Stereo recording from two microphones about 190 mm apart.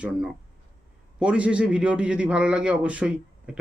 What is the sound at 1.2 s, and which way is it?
A man's voice, 5° right (ahead or behind).